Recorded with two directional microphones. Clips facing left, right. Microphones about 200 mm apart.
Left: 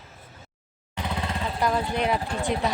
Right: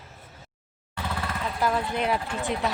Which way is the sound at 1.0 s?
20° left (ahead or behind).